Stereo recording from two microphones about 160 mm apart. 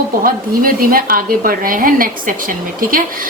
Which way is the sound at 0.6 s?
65° right (ahead or behind).